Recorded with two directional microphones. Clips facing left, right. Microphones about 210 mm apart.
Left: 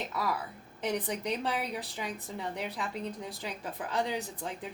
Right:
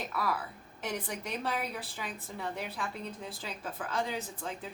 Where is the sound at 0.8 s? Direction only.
15° left (ahead or behind).